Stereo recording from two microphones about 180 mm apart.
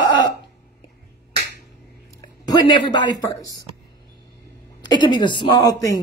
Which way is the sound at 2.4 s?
20° left (ahead or behind).